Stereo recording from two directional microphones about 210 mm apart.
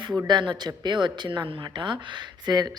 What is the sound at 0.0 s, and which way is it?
Speech, 20° right (ahead or behind).